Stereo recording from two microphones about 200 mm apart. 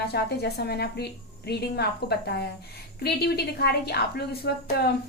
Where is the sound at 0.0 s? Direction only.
55° left (ahead or behind).